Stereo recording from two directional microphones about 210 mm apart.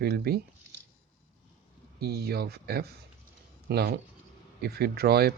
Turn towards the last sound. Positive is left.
turn(degrees=-50)  # may be behind; listen again after turning